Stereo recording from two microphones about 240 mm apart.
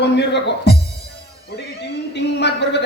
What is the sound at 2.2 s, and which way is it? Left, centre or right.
Speech, left.